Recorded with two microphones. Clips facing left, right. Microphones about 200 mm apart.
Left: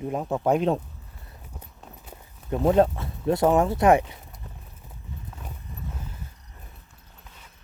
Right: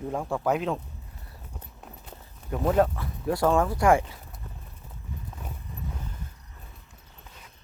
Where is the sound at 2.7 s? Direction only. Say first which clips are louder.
Left 3 dB; 25° left (ahead or behind).